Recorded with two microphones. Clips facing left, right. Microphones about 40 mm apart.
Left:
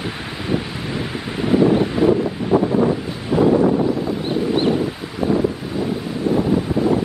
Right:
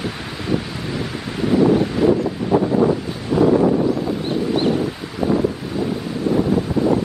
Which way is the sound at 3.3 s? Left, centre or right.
Centre.